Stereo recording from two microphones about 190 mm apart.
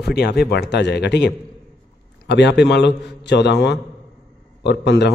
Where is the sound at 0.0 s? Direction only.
60° left (ahead or behind).